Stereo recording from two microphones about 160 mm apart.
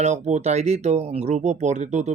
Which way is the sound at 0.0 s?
45° right (ahead or behind).